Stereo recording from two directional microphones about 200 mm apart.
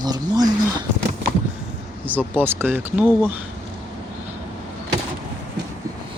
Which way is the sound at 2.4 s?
10° right (ahead or behind).